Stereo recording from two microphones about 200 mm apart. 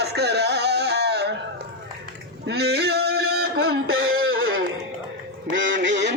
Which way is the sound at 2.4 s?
55° right (ahead or behind).